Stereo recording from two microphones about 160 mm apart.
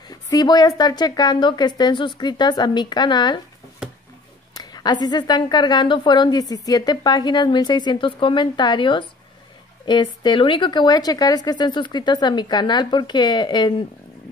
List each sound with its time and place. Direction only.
0.1 s a woman's voice: 25° left (ahead or behind)
4.6 s a sound: 25° left (ahead or behind)
5.0 s a woman's voice: 25° left (ahead or behind)